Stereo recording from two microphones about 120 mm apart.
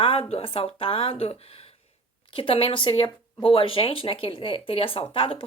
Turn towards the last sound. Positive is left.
turn(degrees=50)  # may be behind; listen again after turning